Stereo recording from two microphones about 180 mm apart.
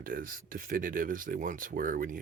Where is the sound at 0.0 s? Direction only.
50° right (ahead or behind).